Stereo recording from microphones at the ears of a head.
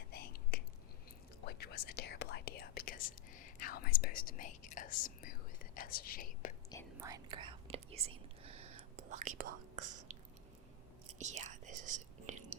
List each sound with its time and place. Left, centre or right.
0.1 s whispering: left
7.0 s whispering: right
11.2 s whispering: right